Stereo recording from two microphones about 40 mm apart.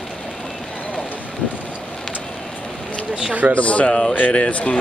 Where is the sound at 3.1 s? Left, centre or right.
Right.